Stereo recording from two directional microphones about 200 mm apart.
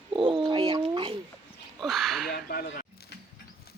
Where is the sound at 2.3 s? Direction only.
45° left (ahead or behind).